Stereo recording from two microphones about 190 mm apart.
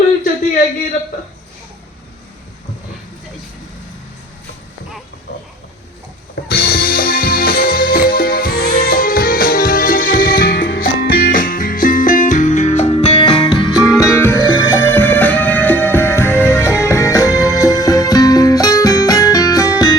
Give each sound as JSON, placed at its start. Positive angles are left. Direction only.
{"t": 6.5, "sound": "music", "side_deg": 55}
{"t": 14.1, "sound": "music", "side_deg": 10}